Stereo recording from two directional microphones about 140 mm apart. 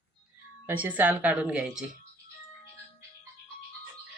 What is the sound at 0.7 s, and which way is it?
A woman's voice, 10° right (ahead or behind).